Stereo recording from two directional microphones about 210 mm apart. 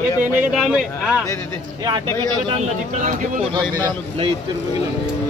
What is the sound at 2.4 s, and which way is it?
Speech, 35° right (ahead or behind).